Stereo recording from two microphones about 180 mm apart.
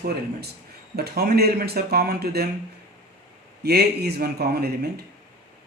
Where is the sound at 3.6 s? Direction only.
60° right (ahead or behind).